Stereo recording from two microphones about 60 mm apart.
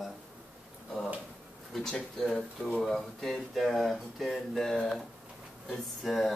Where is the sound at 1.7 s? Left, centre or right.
Centre.